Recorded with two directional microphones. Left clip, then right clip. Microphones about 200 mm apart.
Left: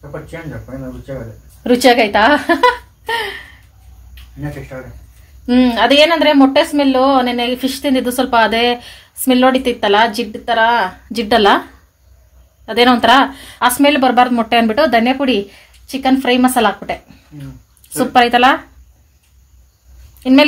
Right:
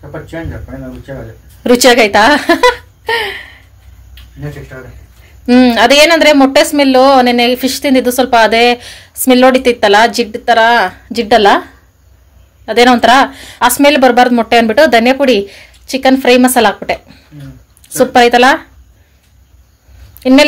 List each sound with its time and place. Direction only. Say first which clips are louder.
1.6 s speech: right 4 dB; 25° right (ahead or behind)
5.5 s a woman's voice: right 5 dB; 25° right (ahead or behind)
12.6 s a woman's voice: right 4 dB; 20° right (ahead or behind)
20.2 s a sound: right 4 dB; 20° right (ahead or behind)